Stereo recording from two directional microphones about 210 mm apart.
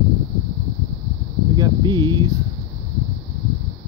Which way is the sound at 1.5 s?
20° right (ahead or behind).